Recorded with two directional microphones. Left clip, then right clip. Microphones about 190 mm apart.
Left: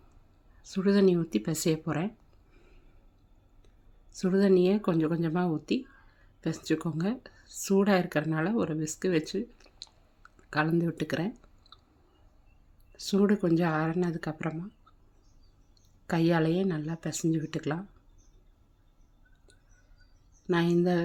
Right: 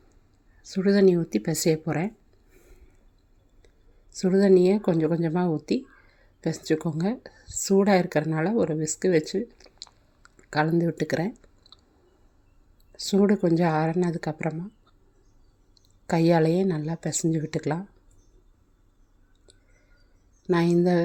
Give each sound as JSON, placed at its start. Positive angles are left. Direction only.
{"t": 0.6, "sound": "speech", "side_deg": -10}
{"t": 4.1, "sound": "speech", "side_deg": -10}
{"t": 12.9, "sound": "speech", "side_deg": -15}
{"t": 16.0, "sound": "speech", "side_deg": -15}
{"t": 20.5, "sound": "speech", "side_deg": -15}